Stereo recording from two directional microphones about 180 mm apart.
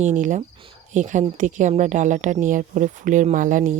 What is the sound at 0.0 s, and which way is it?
Speech, 45° right (ahead or behind).